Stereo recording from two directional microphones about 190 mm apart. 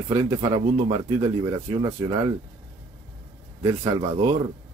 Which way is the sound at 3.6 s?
20° right (ahead or behind).